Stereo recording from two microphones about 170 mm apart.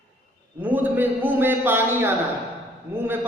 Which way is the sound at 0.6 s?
10° right (ahead or behind).